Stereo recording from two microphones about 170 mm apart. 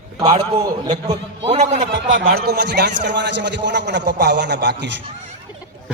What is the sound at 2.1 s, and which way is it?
A man's voice, 60° right (ahead or behind).